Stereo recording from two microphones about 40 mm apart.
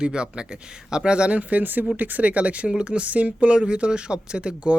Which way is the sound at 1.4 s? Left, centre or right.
Right.